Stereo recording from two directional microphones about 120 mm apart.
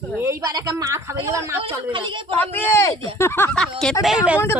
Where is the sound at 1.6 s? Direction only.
45° right (ahead or behind).